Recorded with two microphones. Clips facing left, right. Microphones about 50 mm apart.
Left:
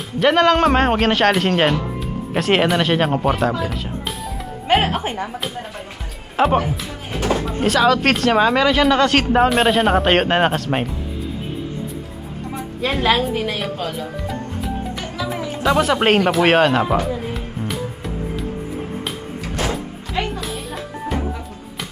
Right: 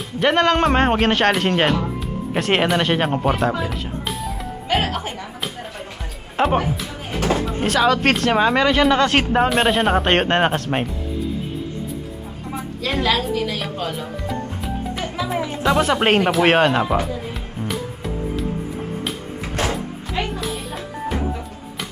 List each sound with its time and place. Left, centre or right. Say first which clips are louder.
0.2 s speech: left 2 dB; centre
4.7 s speech: left 4 dB; left
6.3 s speech: left 2 dB; centre
13.0 s a woman's voice: left 2 dB; left
13.6 s music: left 1 dB; centre
15.6 s speech: left 2 dB; centre
17.3 s music: left 1 dB; centre
20.1 s music: left 1 dB; centre